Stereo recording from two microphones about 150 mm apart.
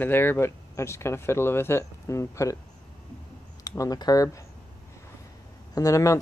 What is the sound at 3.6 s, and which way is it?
Speech, 20° left (ahead or behind).